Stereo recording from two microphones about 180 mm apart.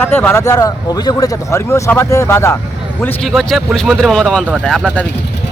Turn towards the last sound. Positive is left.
turn(degrees=0)  # may be behind; listen again after turning